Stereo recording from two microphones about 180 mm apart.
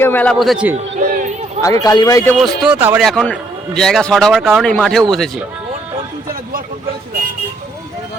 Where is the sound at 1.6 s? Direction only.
20° left (ahead or behind).